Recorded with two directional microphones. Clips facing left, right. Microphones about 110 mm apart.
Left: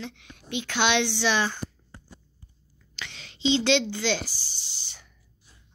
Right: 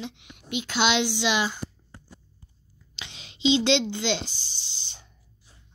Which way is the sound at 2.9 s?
20° right (ahead or behind).